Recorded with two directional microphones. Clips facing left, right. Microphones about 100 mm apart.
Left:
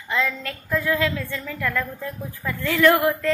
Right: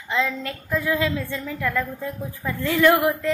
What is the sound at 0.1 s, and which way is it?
A woman's voice, 20° right (ahead or behind).